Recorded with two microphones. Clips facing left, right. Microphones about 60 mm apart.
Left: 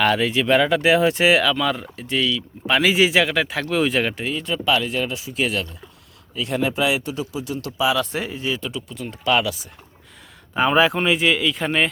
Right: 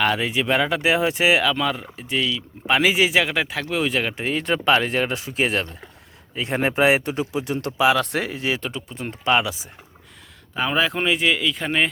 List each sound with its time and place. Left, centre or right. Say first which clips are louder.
0.0 s speech: left 2 dB; centre
4.2 s speech: right 2 dB; right
5.3 s speech: right 1 dB; right
8.7 s speech: even; right
10.5 s speech: left 5 dB; centre
10.9 s speech: left 2 dB; centre